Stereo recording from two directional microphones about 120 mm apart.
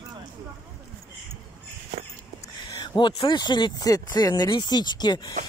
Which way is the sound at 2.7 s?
40° left (ahead or behind).